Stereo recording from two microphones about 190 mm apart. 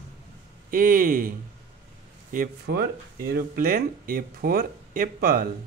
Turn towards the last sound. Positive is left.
turn(degrees=-50)  # may be behind; listen again after turning